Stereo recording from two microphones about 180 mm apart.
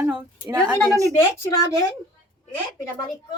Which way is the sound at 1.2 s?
15° left (ahead or behind).